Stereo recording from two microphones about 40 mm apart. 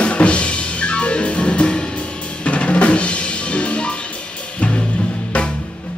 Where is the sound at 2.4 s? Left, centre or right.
Left.